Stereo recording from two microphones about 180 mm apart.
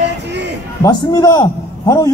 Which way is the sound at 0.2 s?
75° right (ahead or behind).